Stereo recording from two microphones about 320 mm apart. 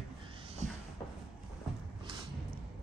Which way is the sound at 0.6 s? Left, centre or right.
Right.